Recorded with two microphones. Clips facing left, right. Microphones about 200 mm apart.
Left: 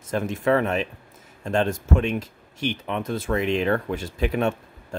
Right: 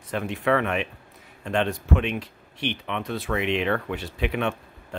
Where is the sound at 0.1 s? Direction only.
45° left (ahead or behind).